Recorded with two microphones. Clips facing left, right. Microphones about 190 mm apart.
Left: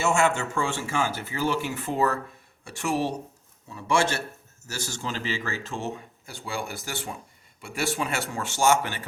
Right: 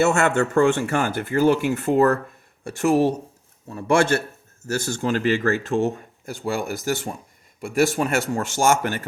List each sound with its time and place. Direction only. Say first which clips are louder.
0.0 s speech: right 5 dB; 65° right (ahead or behind); by 9.0 s 45° right (ahead or behind)